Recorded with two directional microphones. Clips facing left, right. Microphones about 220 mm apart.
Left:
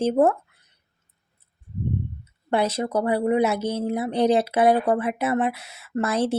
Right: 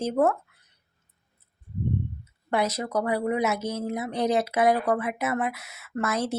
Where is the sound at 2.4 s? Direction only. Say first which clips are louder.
Left 3 dB; 30° left (ahead or behind).